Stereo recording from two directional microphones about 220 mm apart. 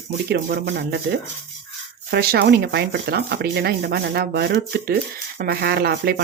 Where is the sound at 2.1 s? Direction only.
45° right (ahead or behind).